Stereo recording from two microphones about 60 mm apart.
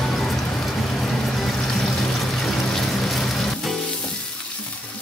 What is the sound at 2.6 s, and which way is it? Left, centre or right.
Music, centre.